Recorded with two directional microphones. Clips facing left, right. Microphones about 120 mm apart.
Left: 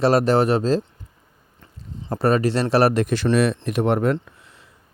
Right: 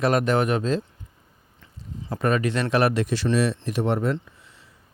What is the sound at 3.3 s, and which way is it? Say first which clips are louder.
Speech: left 4 dB; 65° left (ahead or behind).